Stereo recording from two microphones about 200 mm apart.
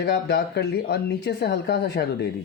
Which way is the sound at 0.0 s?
55° left (ahead or behind).